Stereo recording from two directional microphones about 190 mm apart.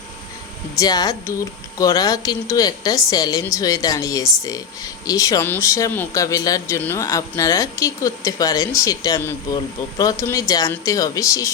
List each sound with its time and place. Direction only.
0.8 s speech: 20° left (ahead or behind)